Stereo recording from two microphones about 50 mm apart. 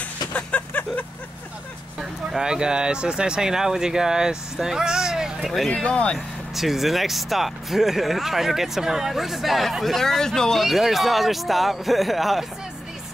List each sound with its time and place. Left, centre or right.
0.3 s a sound: left
2.0 s speech: centre
5.7 s speech: left
6.1 s speech: centre